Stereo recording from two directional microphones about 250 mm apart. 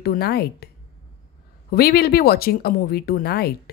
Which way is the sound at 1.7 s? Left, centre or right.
Left.